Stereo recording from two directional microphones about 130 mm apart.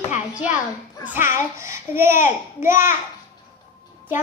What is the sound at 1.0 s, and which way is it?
A child's voice, 15° right (ahead or behind).